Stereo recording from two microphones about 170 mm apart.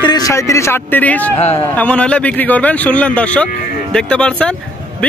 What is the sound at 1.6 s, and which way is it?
Speech, 10° left (ahead or behind).